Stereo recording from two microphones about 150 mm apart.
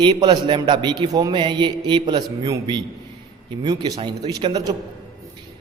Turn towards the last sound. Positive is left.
turn(degrees=-30)  # may be behind; listen again after turning